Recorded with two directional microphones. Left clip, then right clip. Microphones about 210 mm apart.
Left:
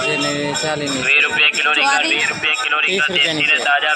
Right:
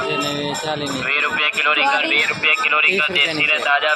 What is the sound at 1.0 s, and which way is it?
Speech, 50° right (ahead or behind).